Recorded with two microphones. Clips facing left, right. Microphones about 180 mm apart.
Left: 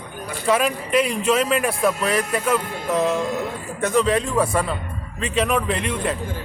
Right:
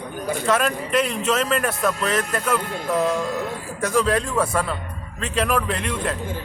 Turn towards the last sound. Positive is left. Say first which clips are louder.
# left 2 dB
turn(degrees=0)  # may be behind; listen again after turning